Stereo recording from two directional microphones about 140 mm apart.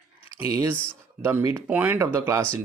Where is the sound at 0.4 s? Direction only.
20° right (ahead or behind).